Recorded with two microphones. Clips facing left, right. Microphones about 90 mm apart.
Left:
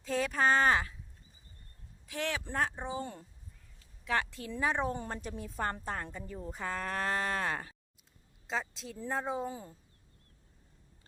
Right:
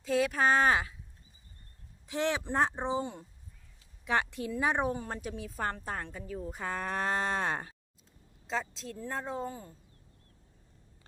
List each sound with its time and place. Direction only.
0.0 s a sound: 5° right (ahead or behind)
2.0 s a woman's voice: 20° right (ahead or behind)
4.9 s a woman's voice: 5° right (ahead or behind); by 7.7 s 20° right (ahead or behind)
8.4 s a woman's voice: 5° left (ahead or behind)